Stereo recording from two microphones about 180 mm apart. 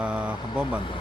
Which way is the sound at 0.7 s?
30° left (ahead or behind).